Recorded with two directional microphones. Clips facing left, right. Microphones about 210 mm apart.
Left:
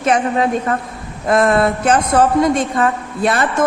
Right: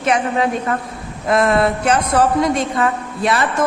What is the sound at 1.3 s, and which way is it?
Speech, 45° left (ahead or behind).